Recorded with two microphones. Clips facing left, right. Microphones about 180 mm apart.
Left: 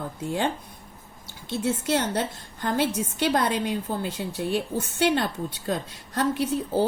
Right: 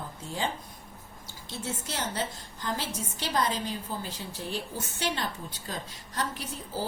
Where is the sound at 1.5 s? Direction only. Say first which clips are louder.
Left 11 dB; 65° left (ahead or behind).